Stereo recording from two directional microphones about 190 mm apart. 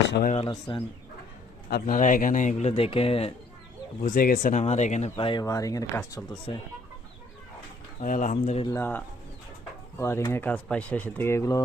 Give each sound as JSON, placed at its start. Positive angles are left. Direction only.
{"t": 0.3, "sound": "speech", "side_deg": 30}
{"t": 1.7, "sound": "speech", "side_deg": 45}
{"t": 4.0, "sound": "speech", "side_deg": 45}
{"t": 6.5, "sound": "speech", "side_deg": 30}
{"t": 8.0, "sound": "speech", "side_deg": 45}
{"t": 8.6, "sound": "speech", "side_deg": 15}